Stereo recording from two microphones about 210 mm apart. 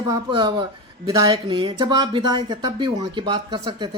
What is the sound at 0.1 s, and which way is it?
Speech, 20° right (ahead or behind).